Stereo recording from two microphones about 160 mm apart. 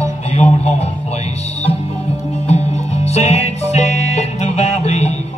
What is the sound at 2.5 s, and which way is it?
Music, 45° left (ahead or behind).